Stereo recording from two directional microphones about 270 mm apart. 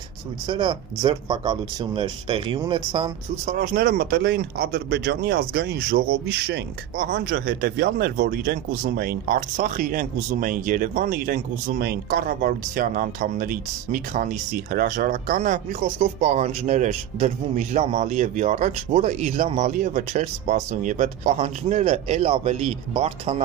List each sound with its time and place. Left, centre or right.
0.5 s speech: centre
3.5 s speech: right